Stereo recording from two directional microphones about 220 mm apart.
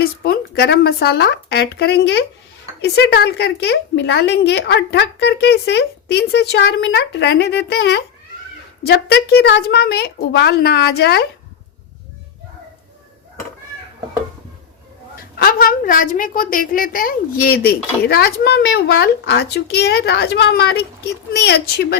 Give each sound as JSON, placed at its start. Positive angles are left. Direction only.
{"t": 0.0, "sound": "a woman's voice", "side_deg": 45}
{"t": 15.4, "sound": "a woman's voice", "side_deg": 40}